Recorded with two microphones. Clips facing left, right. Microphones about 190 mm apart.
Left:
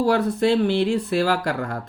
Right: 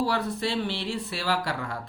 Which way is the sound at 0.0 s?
45° left (ahead or behind).